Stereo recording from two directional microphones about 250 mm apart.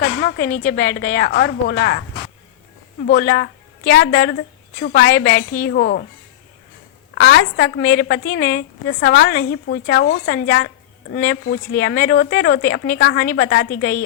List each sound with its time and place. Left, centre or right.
0.0 s a woman's voice: left
3.1 s a woman's voice: left
7.2 s a woman's voice: left